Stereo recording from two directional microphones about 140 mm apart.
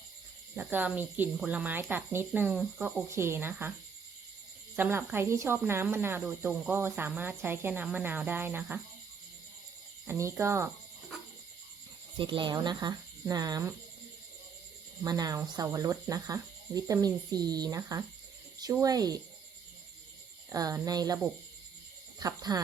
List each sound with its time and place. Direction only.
0.5 s speech: 10° right (ahead or behind)
2.6 s speech: 5° right (ahead or behind)
3.1 s speech: 20° right (ahead or behind)
4.8 s speech: 15° right (ahead or behind)
10.1 s speech: 20° right (ahead or behind)
12.1 s speech: 35° right (ahead or behind)
15.0 s speech: 25° right (ahead or behind)
20.5 s speech: 25° right (ahead or behind)
22.2 s speech: 25° right (ahead or behind)